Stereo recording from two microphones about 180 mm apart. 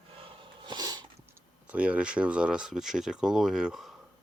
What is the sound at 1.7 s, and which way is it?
Speech, 5° right (ahead or behind).